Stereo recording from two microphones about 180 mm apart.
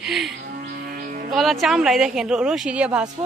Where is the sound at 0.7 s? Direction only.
50° right (ahead or behind).